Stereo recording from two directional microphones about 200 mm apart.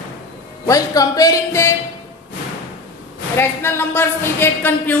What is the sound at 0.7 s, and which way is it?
Speech, 15° left (ahead or behind).